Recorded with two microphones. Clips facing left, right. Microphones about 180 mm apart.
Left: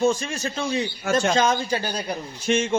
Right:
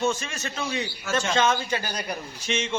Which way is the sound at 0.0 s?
35° left (ahead or behind).